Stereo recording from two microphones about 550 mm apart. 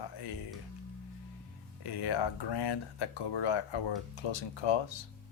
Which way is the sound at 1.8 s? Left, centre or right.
Left.